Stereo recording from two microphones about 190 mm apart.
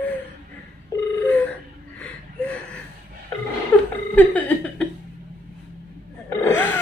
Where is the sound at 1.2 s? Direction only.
10° left (ahead or behind).